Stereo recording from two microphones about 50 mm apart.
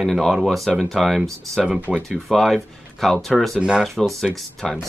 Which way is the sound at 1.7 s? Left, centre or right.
Right.